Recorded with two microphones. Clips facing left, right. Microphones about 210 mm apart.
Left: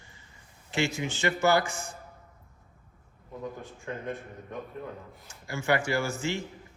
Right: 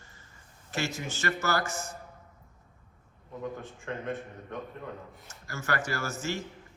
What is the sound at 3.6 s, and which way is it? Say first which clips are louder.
Speech: even; centre (ahead or behind).